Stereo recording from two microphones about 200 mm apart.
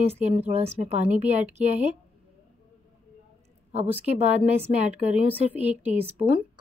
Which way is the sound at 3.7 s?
30° right (ahead or behind).